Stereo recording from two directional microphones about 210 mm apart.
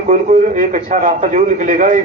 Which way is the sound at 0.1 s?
35° right (ahead or behind).